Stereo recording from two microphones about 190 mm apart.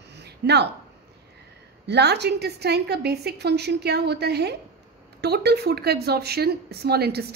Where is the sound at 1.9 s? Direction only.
60° right (ahead or behind).